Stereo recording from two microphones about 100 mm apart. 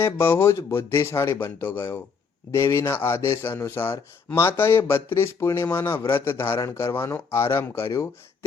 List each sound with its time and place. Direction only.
0.0 s a man's voice: 25° left (ahead or behind)